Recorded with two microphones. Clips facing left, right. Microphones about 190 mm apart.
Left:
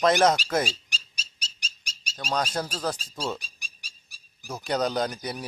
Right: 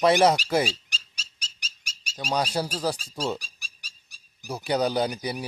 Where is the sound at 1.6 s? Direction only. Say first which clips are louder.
Left 1 dB; 35° left (ahead or behind).